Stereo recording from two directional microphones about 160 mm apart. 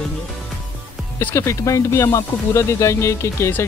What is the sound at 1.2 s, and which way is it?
Speech, 15° left (ahead or behind).